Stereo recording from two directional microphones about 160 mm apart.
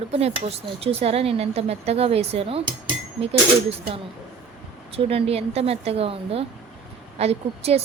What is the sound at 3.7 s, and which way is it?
A woman's voice, 35° right (ahead or behind).